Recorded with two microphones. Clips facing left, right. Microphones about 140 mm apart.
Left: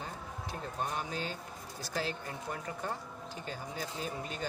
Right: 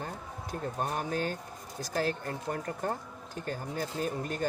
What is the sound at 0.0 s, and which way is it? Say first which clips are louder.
Speech: right 3 dB; 50° right (ahead or behind).